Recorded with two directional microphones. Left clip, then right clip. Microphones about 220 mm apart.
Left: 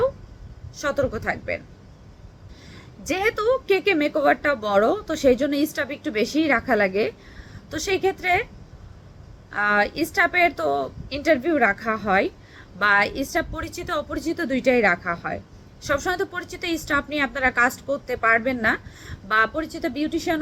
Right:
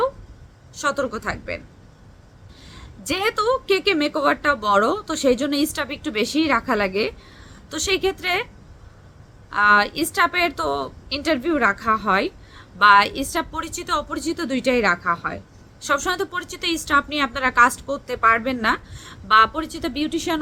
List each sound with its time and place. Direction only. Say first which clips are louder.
0.8 s a woman's voice: right 1 dB; 15° right (ahead or behind)
3.1 s a woman's voice: right 1 dB; 15° right (ahead or behind)
9.5 s a woman's voice: right 5 dB; 15° right (ahead or behind)